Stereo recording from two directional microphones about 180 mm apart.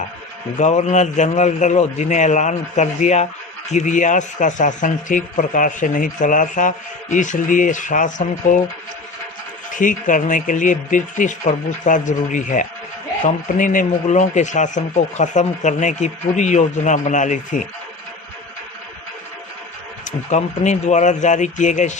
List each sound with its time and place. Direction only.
0.6 s a man's voice: 40° left (ahead or behind)
9.7 s a man's voice: 45° left (ahead or behind)
20.1 s speech: 40° left (ahead or behind)